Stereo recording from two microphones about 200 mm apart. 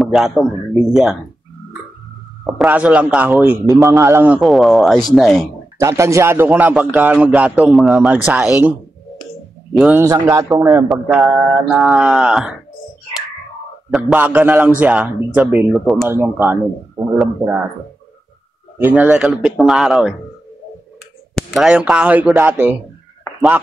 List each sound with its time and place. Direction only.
0.0 s a man's voice: centre (ahead or behind)
2.4 s a man's voice: 5° right (ahead or behind)
4.0 s mantra: 10° right (ahead or behind)
5.8 s a man's voice: 15° right (ahead or behind)
9.8 s mantra: 5° right (ahead or behind)
10.0 s a man's voice: 15° right (ahead or behind)
10.9 s mantra: centre (ahead or behind)
13.8 s a man's voice: 5° right (ahead or behind)
18.8 s mantra: 10° right (ahead or behind)
21.4 s a man's voice: centre (ahead or behind)